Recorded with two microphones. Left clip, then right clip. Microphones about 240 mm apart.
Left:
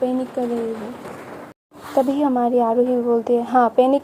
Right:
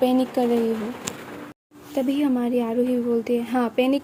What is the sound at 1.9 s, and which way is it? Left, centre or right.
A woman's voice, centre.